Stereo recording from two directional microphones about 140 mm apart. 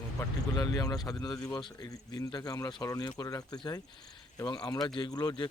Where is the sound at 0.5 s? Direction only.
25° left (ahead or behind).